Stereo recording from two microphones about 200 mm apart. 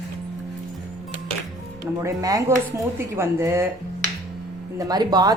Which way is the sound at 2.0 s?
15° right (ahead or behind).